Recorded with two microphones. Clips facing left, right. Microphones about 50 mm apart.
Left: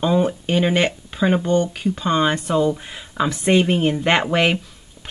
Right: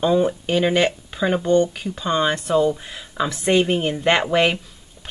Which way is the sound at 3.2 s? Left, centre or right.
Centre.